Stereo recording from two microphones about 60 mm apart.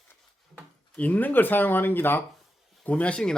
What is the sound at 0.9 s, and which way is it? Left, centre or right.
Speech, left.